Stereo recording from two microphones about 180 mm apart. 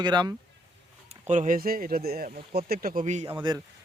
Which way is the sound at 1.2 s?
40° right (ahead or behind).